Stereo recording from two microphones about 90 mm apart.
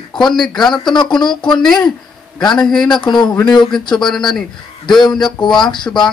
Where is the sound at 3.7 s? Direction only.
5° left (ahead or behind).